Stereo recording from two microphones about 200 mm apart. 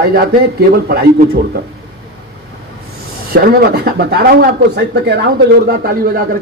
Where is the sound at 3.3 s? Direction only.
50° right (ahead or behind).